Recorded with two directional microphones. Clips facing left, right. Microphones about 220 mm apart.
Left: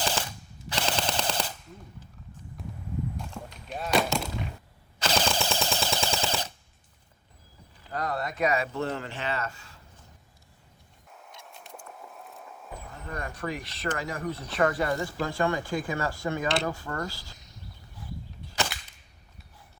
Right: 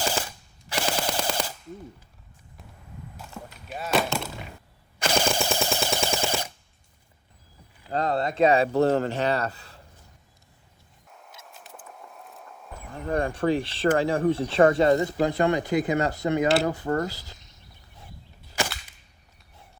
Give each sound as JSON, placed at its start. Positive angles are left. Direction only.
{"t": 0.7, "sound": "machine gun", "side_deg": -10}
{"t": 3.2, "sound": "a sound", "side_deg": -5}
{"t": 4.9, "sound": "machine gun", "side_deg": -10}
{"t": 7.9, "sound": "speech", "side_deg": -25}
{"t": 11.1, "sound": "a sound", "side_deg": 0}
{"t": 13.1, "sound": "speech", "side_deg": -30}
{"t": 18.0, "sound": "arrow", "side_deg": -25}